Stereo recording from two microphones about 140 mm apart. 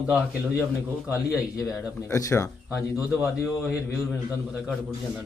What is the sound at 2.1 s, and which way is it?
Speech, 20° left (ahead or behind).